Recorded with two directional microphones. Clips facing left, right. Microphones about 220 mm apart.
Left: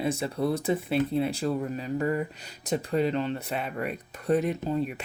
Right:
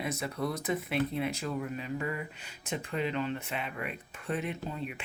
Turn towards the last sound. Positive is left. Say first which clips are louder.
# left 9 dB
turn(degrees=40)  # may be behind; listen again after turning